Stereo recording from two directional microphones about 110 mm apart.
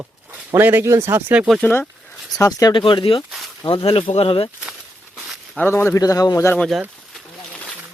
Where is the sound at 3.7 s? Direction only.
55° left (ahead or behind).